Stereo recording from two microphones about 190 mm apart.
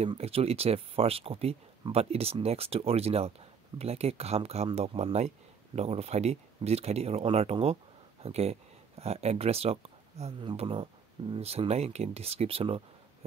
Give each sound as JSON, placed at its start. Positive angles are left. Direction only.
{"t": 0.0, "sound": "speech", "side_deg": -30}